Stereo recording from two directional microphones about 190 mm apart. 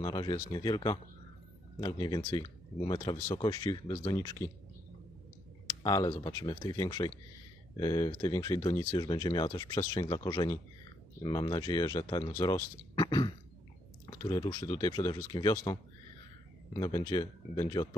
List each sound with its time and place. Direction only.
0.0 s speech: 20° left (ahead or behind)
5.7 s speech: 20° left (ahead or behind)